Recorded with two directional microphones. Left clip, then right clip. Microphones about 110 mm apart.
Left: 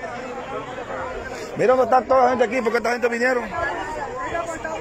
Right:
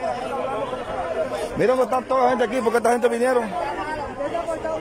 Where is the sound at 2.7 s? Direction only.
25° right (ahead or behind).